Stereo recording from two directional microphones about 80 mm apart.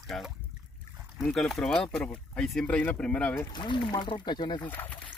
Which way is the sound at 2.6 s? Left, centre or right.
Centre.